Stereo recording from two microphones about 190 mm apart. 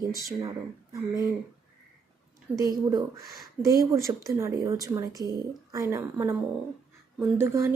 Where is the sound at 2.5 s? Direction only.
20° right (ahead or behind).